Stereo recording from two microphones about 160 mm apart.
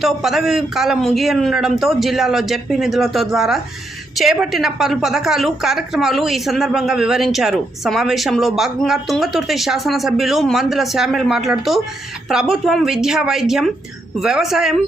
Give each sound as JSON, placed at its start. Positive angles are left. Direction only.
{"t": 0.0, "sound": "a woman's voice", "side_deg": 0}